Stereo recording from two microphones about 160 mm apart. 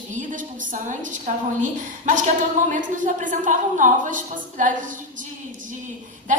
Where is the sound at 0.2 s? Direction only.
55° right (ahead or behind).